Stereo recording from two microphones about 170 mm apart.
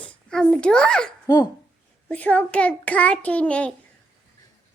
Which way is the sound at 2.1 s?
10° left (ahead or behind).